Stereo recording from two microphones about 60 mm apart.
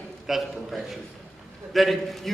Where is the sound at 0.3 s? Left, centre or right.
Centre.